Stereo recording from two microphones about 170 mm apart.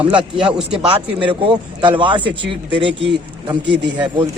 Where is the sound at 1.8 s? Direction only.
30° right (ahead or behind).